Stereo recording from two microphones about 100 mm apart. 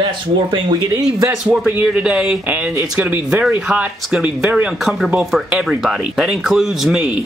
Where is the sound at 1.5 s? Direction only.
15° right (ahead or behind).